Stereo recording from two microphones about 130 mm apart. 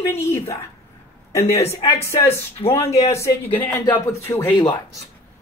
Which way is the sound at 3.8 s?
25° left (ahead or behind).